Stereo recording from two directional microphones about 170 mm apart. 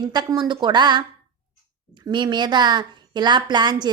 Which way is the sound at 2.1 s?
25° right (ahead or behind).